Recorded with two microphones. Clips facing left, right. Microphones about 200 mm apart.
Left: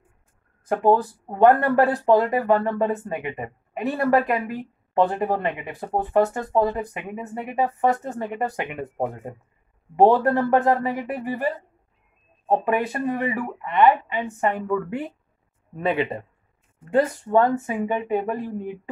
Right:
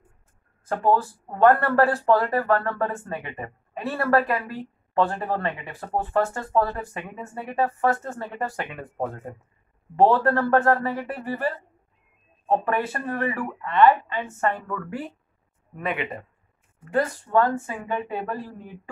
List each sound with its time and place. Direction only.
0.7 s speech: 15° left (ahead or behind)
15.7 s speech: 30° left (ahead or behind)